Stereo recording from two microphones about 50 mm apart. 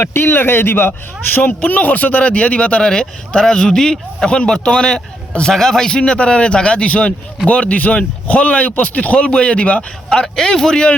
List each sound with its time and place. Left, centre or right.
0.0 s speech: left
1.4 s speech: left
10.1 s a man's voice: centre